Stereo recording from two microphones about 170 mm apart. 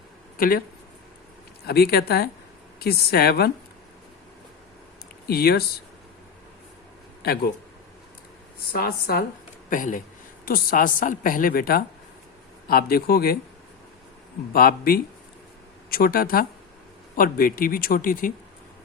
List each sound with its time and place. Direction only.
0.3 s speech: 60° left (ahead or behind)
1.6 s a woman's voice: 65° left (ahead or behind)
5.3 s speech: 65° left (ahead or behind)
7.2 s a man's voice: 65° left (ahead or behind)
8.7 s a woman's voice: 65° left (ahead or behind)
9.6 s a woman's voice: 50° left (ahead or behind)
14.5 s a woman's voice: 60° left (ahead or behind)